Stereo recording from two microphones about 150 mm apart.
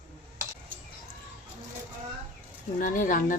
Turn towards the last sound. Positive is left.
turn(degrees=60)  # may be behind; listen again after turning